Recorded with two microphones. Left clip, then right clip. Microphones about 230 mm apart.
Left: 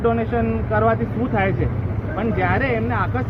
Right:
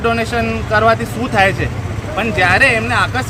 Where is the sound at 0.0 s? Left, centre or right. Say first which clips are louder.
Right 4 dB; right.